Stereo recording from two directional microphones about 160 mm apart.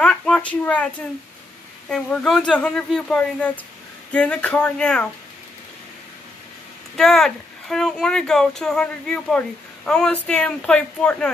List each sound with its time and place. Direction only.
0.0 s speech: 5° left (ahead or behind)
1.9 s speech: 5° left (ahead or behind)
7.0 s speech: 5° left (ahead or behind)